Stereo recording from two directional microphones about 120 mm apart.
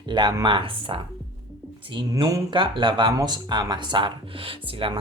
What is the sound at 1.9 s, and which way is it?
Speech, 40° right (ahead or behind).